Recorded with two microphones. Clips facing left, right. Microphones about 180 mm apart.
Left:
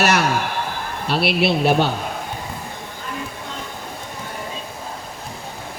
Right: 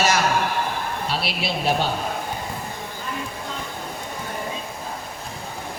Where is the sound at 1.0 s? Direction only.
65° left (ahead or behind).